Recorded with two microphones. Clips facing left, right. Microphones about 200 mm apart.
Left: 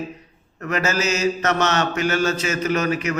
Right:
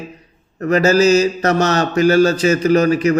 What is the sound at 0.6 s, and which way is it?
Speech, 35° right (ahead or behind).